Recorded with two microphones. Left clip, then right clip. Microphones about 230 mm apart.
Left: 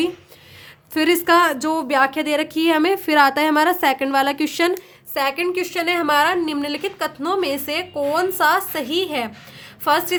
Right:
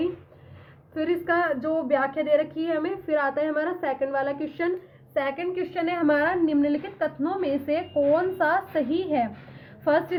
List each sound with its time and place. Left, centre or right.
0.9 s a woman's voice: left
5.1 s a woman's voice: left